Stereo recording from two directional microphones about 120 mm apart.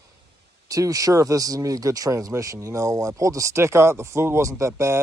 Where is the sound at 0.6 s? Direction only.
30° right (ahead or behind).